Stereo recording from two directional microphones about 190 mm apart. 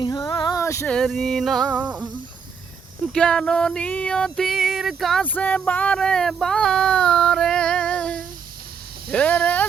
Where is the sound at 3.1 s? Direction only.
5° left (ahead or behind).